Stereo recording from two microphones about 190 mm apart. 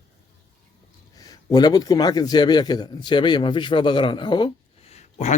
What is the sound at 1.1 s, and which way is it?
A man's voice, 20° left (ahead or behind).